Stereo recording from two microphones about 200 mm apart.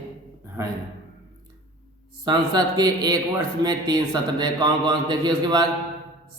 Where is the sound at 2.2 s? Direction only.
20° right (ahead or behind).